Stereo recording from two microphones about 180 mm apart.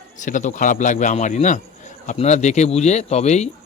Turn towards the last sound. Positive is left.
turn(degrees=40)  # may be behind; listen again after turning